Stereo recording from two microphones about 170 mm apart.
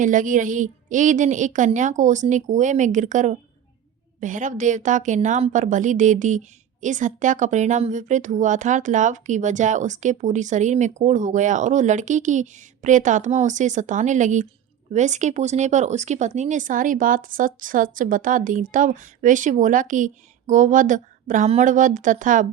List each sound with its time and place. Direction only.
0.0 s speech: 50° right (ahead or behind)